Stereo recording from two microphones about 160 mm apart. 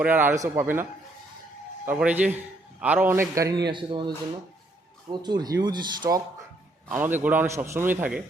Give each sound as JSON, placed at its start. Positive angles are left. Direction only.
{"t": 0.0, "sound": "a man's voice", "side_deg": -10}
{"t": 2.0, "sound": "a man's voice", "side_deg": -10}
{"t": 3.7, "sound": "speech", "side_deg": -30}
{"t": 5.1, "sound": "speech", "side_deg": -25}
{"t": 6.8, "sound": "a man's voice", "side_deg": -15}